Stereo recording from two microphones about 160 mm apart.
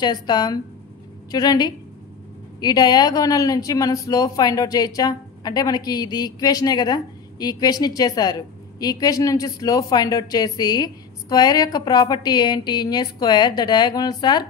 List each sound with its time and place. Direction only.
0.0 s speech: 25° left (ahead or behind)